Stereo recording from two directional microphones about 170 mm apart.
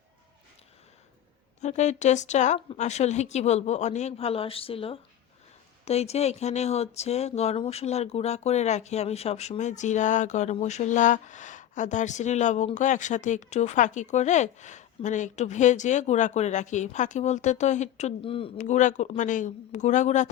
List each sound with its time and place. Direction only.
1.6 s a woman's voice: 45° left (ahead or behind)
18.5 s speech: 45° left (ahead or behind)